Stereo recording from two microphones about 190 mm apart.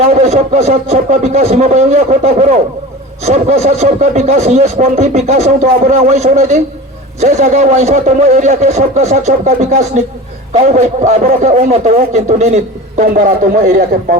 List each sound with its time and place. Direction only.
0.1 s a man's voice: 35° right (ahead or behind)